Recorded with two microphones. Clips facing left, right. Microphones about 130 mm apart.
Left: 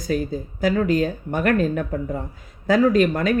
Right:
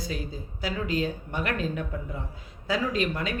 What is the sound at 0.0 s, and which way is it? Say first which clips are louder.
Speech: left 10 dB; 50° left (ahead or behind).